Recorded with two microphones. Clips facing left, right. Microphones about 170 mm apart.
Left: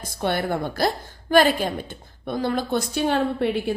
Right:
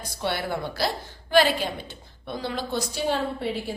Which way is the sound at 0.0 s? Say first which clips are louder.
Left 4 dB; 50° left (ahead or behind).